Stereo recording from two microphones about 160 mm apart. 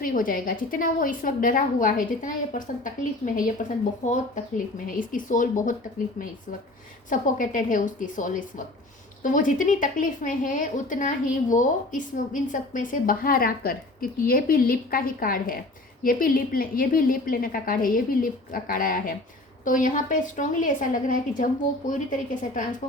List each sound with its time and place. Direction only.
0.0 s a woman's voice: 60° left (ahead or behind)
7.1 s a woman's voice: 55° left (ahead or behind)